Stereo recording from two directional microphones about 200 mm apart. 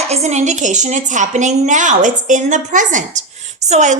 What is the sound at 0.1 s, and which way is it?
A woman's voice, 35° right (ahead or behind).